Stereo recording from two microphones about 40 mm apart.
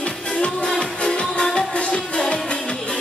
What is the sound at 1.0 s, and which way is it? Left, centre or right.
Music, centre.